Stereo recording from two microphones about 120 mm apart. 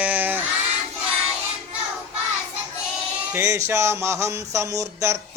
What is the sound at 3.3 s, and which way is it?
Speech, 25° right (ahead or behind).